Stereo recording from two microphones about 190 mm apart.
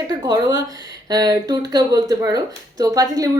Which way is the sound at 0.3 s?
20° right (ahead or behind).